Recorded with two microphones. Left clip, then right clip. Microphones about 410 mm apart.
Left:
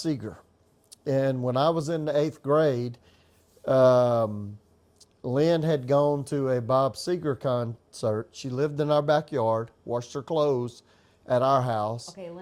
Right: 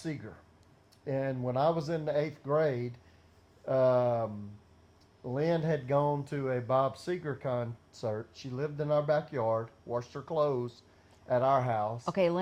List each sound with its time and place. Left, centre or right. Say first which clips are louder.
0.0 s speech: left 10 dB; left
12.0 s speech: right 12 dB; right